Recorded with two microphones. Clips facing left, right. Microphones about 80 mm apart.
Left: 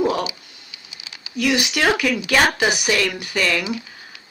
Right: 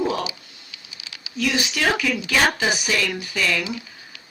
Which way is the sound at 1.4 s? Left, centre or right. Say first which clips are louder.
Left 3 dB; left.